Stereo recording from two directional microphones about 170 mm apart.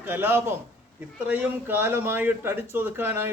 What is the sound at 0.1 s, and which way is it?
A man's voice, 15° right (ahead or behind).